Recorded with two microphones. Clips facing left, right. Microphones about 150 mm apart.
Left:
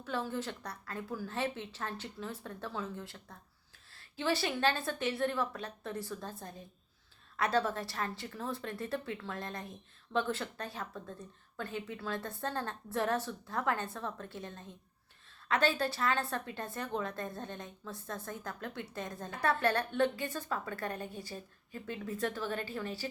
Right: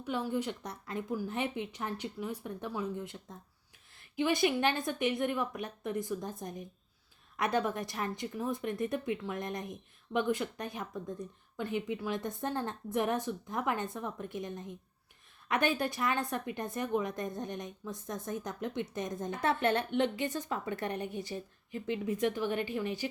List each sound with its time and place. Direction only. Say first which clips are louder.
0.0 s a woman's voice: right 3 dB; 15° right (ahead or behind)